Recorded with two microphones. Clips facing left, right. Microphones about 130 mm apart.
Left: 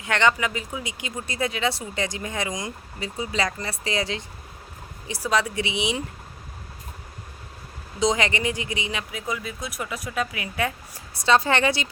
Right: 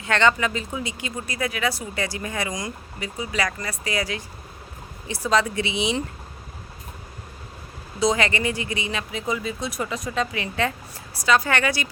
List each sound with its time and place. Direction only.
0.0 s speech: 15° left (ahead or behind)
5.0 s speech: 10° left (ahead or behind)
7.9 s speech: 20° left (ahead or behind)
9.3 s speech: 5° left (ahead or behind)
11.3 s speech: 25° left (ahead or behind)